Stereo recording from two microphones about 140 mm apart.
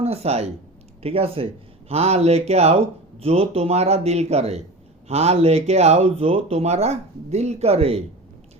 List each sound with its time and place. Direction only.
0.0 s speech: 45° right (ahead or behind)